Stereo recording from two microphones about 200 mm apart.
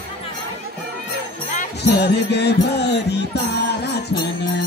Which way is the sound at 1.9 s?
55° left (ahead or behind).